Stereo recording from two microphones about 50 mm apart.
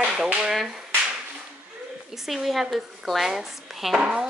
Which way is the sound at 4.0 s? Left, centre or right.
Centre.